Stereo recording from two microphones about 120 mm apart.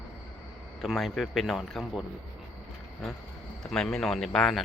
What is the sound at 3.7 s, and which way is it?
Speech, 5° left (ahead or behind).